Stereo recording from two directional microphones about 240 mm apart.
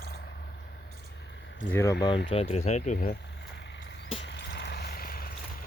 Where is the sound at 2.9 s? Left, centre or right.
Left.